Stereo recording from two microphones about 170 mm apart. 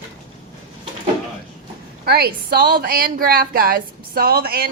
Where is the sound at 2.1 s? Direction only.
65° right (ahead or behind).